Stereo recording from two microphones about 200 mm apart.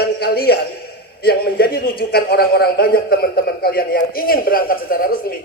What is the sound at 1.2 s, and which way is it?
A man's voice, 50° left (ahead or behind).